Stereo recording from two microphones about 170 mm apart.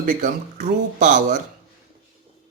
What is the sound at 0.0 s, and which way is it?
Speech, 45° right (ahead or behind).